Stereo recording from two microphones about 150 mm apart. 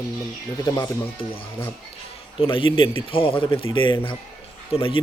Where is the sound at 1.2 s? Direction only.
40° left (ahead or behind).